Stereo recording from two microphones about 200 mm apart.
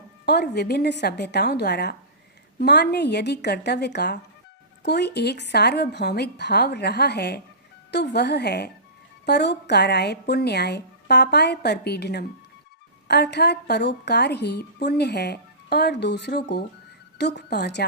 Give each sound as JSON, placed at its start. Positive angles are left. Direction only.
{"t": 0.3, "sound": "a woman's voice", "side_deg": 55}